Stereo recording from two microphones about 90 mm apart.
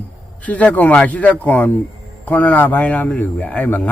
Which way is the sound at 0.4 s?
15° left (ahead or behind).